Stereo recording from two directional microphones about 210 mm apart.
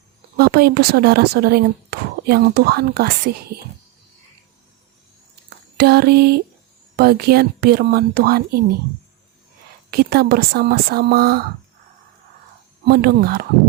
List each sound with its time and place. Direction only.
0.3 s speech: 45° right (ahead or behind)
5.7 s speech: 50° right (ahead or behind)
9.9 s speech: 45° right (ahead or behind)
12.8 s speech: 50° right (ahead or behind)